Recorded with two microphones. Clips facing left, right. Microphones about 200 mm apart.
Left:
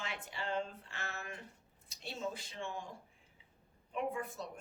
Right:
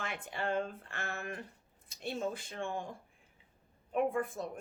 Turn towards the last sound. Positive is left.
turn(degrees=-50)  # may be behind; listen again after turning